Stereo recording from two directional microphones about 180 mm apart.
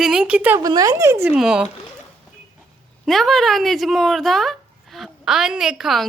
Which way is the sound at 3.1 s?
Centre (ahead or behind).